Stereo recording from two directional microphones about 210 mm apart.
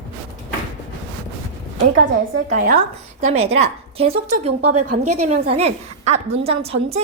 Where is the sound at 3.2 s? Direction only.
30° right (ahead or behind).